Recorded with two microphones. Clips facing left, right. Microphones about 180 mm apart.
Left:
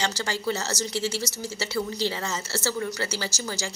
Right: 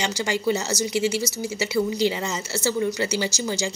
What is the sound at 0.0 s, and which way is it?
A woman's voice, 15° right (ahead or behind).